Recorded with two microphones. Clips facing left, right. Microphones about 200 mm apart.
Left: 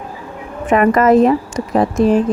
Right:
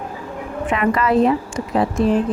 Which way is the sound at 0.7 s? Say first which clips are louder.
Left 7 dB; 45° left (ahead or behind).